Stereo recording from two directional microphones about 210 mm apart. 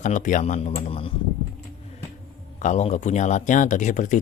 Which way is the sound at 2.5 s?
35° left (ahead or behind).